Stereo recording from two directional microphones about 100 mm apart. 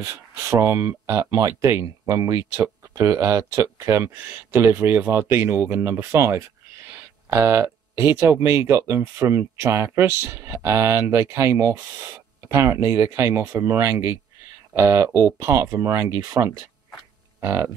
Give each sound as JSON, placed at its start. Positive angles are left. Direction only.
{"t": 0.0, "sound": "speech", "side_deg": -25}
{"t": 17.4, "sound": "hum", "side_deg": -25}